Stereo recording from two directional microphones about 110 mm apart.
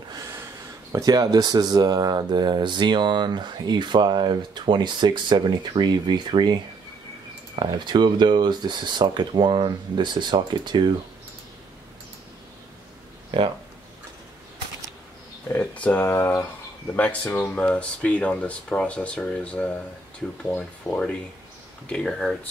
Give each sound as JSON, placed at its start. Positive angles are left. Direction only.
{"t": 0.1, "sound": "a sound", "side_deg": -25}
{"t": 0.9, "sound": "speech", "side_deg": -35}
{"t": 13.3, "sound": "speech", "side_deg": -50}
{"t": 15.4, "sound": "speech", "side_deg": 15}
{"t": 20.9, "sound": "speech", "side_deg": 10}